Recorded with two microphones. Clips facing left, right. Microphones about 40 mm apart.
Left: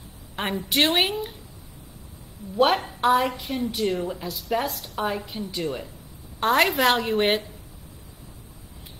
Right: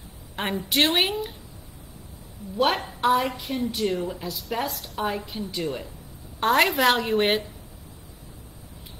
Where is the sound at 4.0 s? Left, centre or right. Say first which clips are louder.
Left 1 dB; centre.